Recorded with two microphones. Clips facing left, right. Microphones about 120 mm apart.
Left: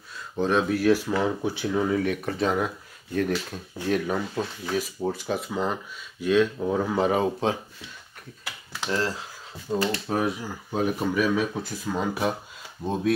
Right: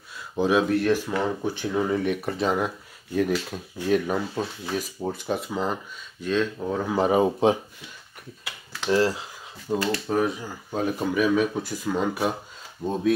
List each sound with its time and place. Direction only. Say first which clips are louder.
0.4 s speech: right 2 dB; 5° right (ahead or behind); by 1.7 s 10° left (ahead or behind)
1.7 s speech: even; centre (ahead or behind)
7.2 s speech: right 4 dB; 15° right (ahead or behind)
8.9 s speech: right 6 dB; 10° right (ahead or behind)
10.0 s speech: right 2 dB; 5° left (ahead or behind)